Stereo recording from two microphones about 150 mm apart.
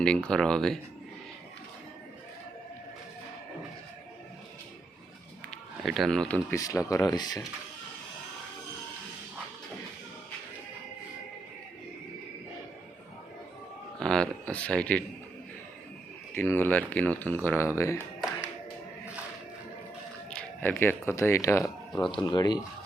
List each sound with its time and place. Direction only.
0.0 s speech: 5° left (ahead or behind)
5.5 s run: centre (ahead or behind)
6.5 s speech: 20° left (ahead or behind)
14.0 s speech: 5° left (ahead or behind)
16.3 s speech: 15° left (ahead or behind)
20.3 s speech: 15° left (ahead or behind)
22.1 s speech: 30° left (ahead or behind)